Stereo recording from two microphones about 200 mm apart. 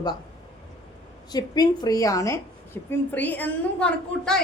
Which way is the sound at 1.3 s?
20° left (ahead or behind).